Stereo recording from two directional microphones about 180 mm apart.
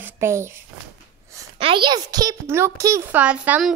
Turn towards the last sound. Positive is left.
turn(degrees=-5)  # may be behind; listen again after turning